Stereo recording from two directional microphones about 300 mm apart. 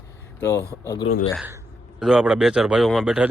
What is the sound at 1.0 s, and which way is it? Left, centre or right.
Speech, left.